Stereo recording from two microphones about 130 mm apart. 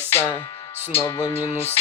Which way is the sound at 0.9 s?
20° left (ahead or behind).